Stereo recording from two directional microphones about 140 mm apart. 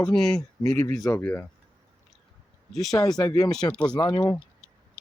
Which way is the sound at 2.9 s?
25° left (ahead or behind).